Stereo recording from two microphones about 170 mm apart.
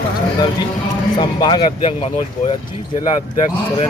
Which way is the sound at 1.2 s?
25° left (ahead or behind).